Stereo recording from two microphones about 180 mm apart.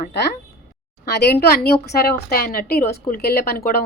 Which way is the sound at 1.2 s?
60° left (ahead or behind).